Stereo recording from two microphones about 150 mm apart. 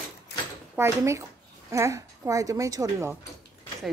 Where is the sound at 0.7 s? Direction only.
15° right (ahead or behind).